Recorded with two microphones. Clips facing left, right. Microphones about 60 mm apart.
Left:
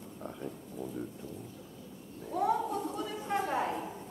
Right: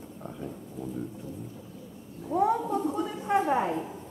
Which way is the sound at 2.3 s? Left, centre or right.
Centre.